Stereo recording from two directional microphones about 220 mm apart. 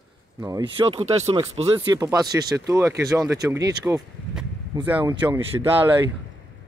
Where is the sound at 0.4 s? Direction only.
20° right (ahead or behind).